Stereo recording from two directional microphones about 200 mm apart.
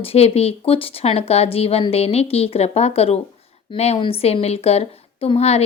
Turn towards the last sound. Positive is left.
turn(degrees=30)  # may be behind; listen again after turning